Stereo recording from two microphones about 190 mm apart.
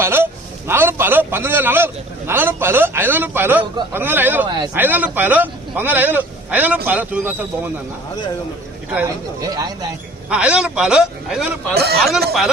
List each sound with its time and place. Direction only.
0.0 s a sound: 10° right (ahead or behind)
0.7 s a man's voice: 10° right (ahead or behind)
4.4 s speech: 25° right (ahead or behind)
4.7 s a man's voice: 10° right (ahead or behind)
9.0 s speech: 20° right (ahead or behind)
10.2 s a man's voice: 5° right (ahead or behind)
11.7 s speech: 55° right (ahead or behind)